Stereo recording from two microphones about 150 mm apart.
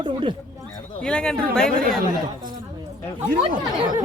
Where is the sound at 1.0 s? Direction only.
5° left (ahead or behind).